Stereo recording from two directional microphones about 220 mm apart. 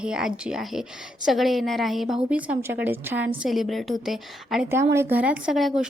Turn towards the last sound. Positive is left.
turn(degrees=0)  # may be behind; listen again after turning